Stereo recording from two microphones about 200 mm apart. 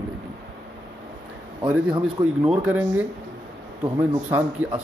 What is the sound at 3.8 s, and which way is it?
Speech, 20° right (ahead or behind).